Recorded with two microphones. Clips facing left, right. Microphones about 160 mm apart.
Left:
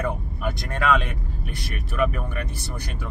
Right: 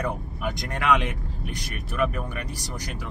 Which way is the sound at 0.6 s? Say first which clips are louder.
Left 1 dB; 20° right (ahead or behind).